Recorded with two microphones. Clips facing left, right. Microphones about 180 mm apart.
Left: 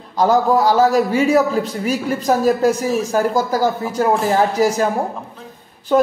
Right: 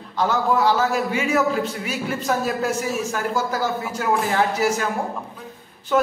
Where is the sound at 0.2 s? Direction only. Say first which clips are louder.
Left 5 dB; 40° left (ahead or behind).